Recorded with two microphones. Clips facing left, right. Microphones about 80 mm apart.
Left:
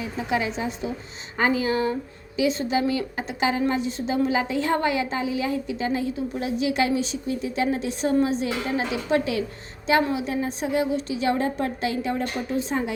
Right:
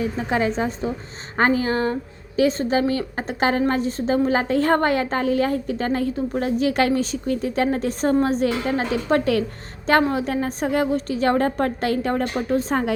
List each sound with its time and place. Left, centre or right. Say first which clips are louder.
0.2 s a woman's voice: right 2 dB; right